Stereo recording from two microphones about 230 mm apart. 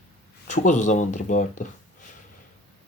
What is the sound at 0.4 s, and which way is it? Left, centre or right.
Speech, left.